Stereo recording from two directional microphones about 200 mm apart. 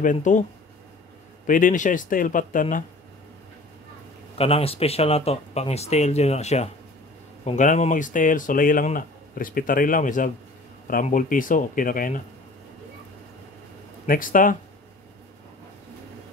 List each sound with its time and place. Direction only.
0.0 s speech: 40° left (ahead or behind)
1.5 s speech: 40° left (ahead or behind)
4.4 s speech: 30° left (ahead or behind)
14.0 s speech: 45° left (ahead or behind)